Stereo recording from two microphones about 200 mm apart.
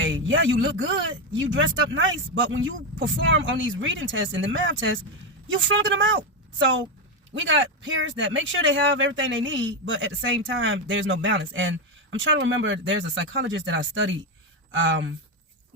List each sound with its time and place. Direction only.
0.0 s speech: 70° right (ahead or behind)